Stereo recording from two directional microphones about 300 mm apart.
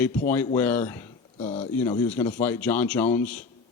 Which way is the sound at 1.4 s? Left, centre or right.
Left.